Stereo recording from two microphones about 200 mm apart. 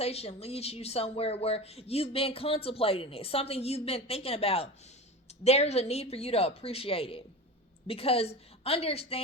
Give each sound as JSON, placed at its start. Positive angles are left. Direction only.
{"t": 0.0, "sound": "speech", "side_deg": 30}